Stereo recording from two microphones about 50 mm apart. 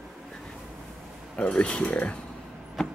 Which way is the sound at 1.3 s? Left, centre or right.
Left.